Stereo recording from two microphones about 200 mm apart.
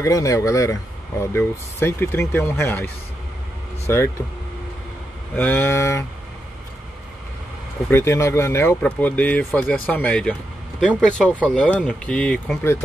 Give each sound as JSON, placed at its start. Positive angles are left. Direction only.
{"t": 0.0, "sound": "speech", "side_deg": 15}
{"t": 5.3, "sound": "speech", "side_deg": 10}
{"t": 7.9, "sound": "speech", "side_deg": 15}